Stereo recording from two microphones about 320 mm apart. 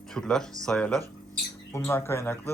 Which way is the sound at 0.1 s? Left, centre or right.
Centre.